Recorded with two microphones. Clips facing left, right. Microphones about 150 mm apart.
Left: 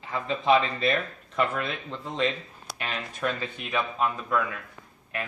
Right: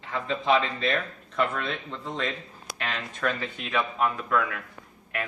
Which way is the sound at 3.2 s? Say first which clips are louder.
Right 1 dB; 15° left (ahead or behind).